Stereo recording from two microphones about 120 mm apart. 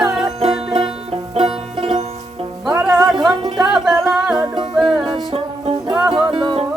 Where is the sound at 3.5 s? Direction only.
Centre (ahead or behind).